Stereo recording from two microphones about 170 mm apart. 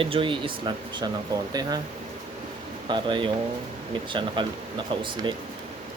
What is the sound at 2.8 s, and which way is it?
Speech, 30° right (ahead or behind).